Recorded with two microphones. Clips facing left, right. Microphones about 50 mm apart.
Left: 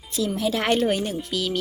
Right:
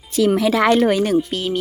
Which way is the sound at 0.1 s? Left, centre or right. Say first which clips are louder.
Right 8 dB; right.